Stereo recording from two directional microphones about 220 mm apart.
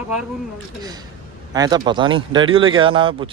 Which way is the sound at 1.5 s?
20° right (ahead or behind).